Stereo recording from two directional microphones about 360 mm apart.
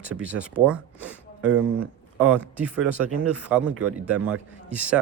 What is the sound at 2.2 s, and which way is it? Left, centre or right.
Speech, centre.